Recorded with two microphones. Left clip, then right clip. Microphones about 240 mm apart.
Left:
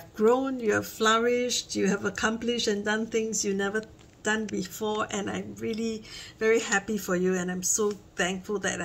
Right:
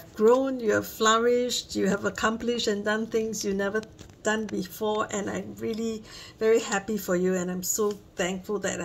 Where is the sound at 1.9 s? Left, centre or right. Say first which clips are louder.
Right 1 dB; centre.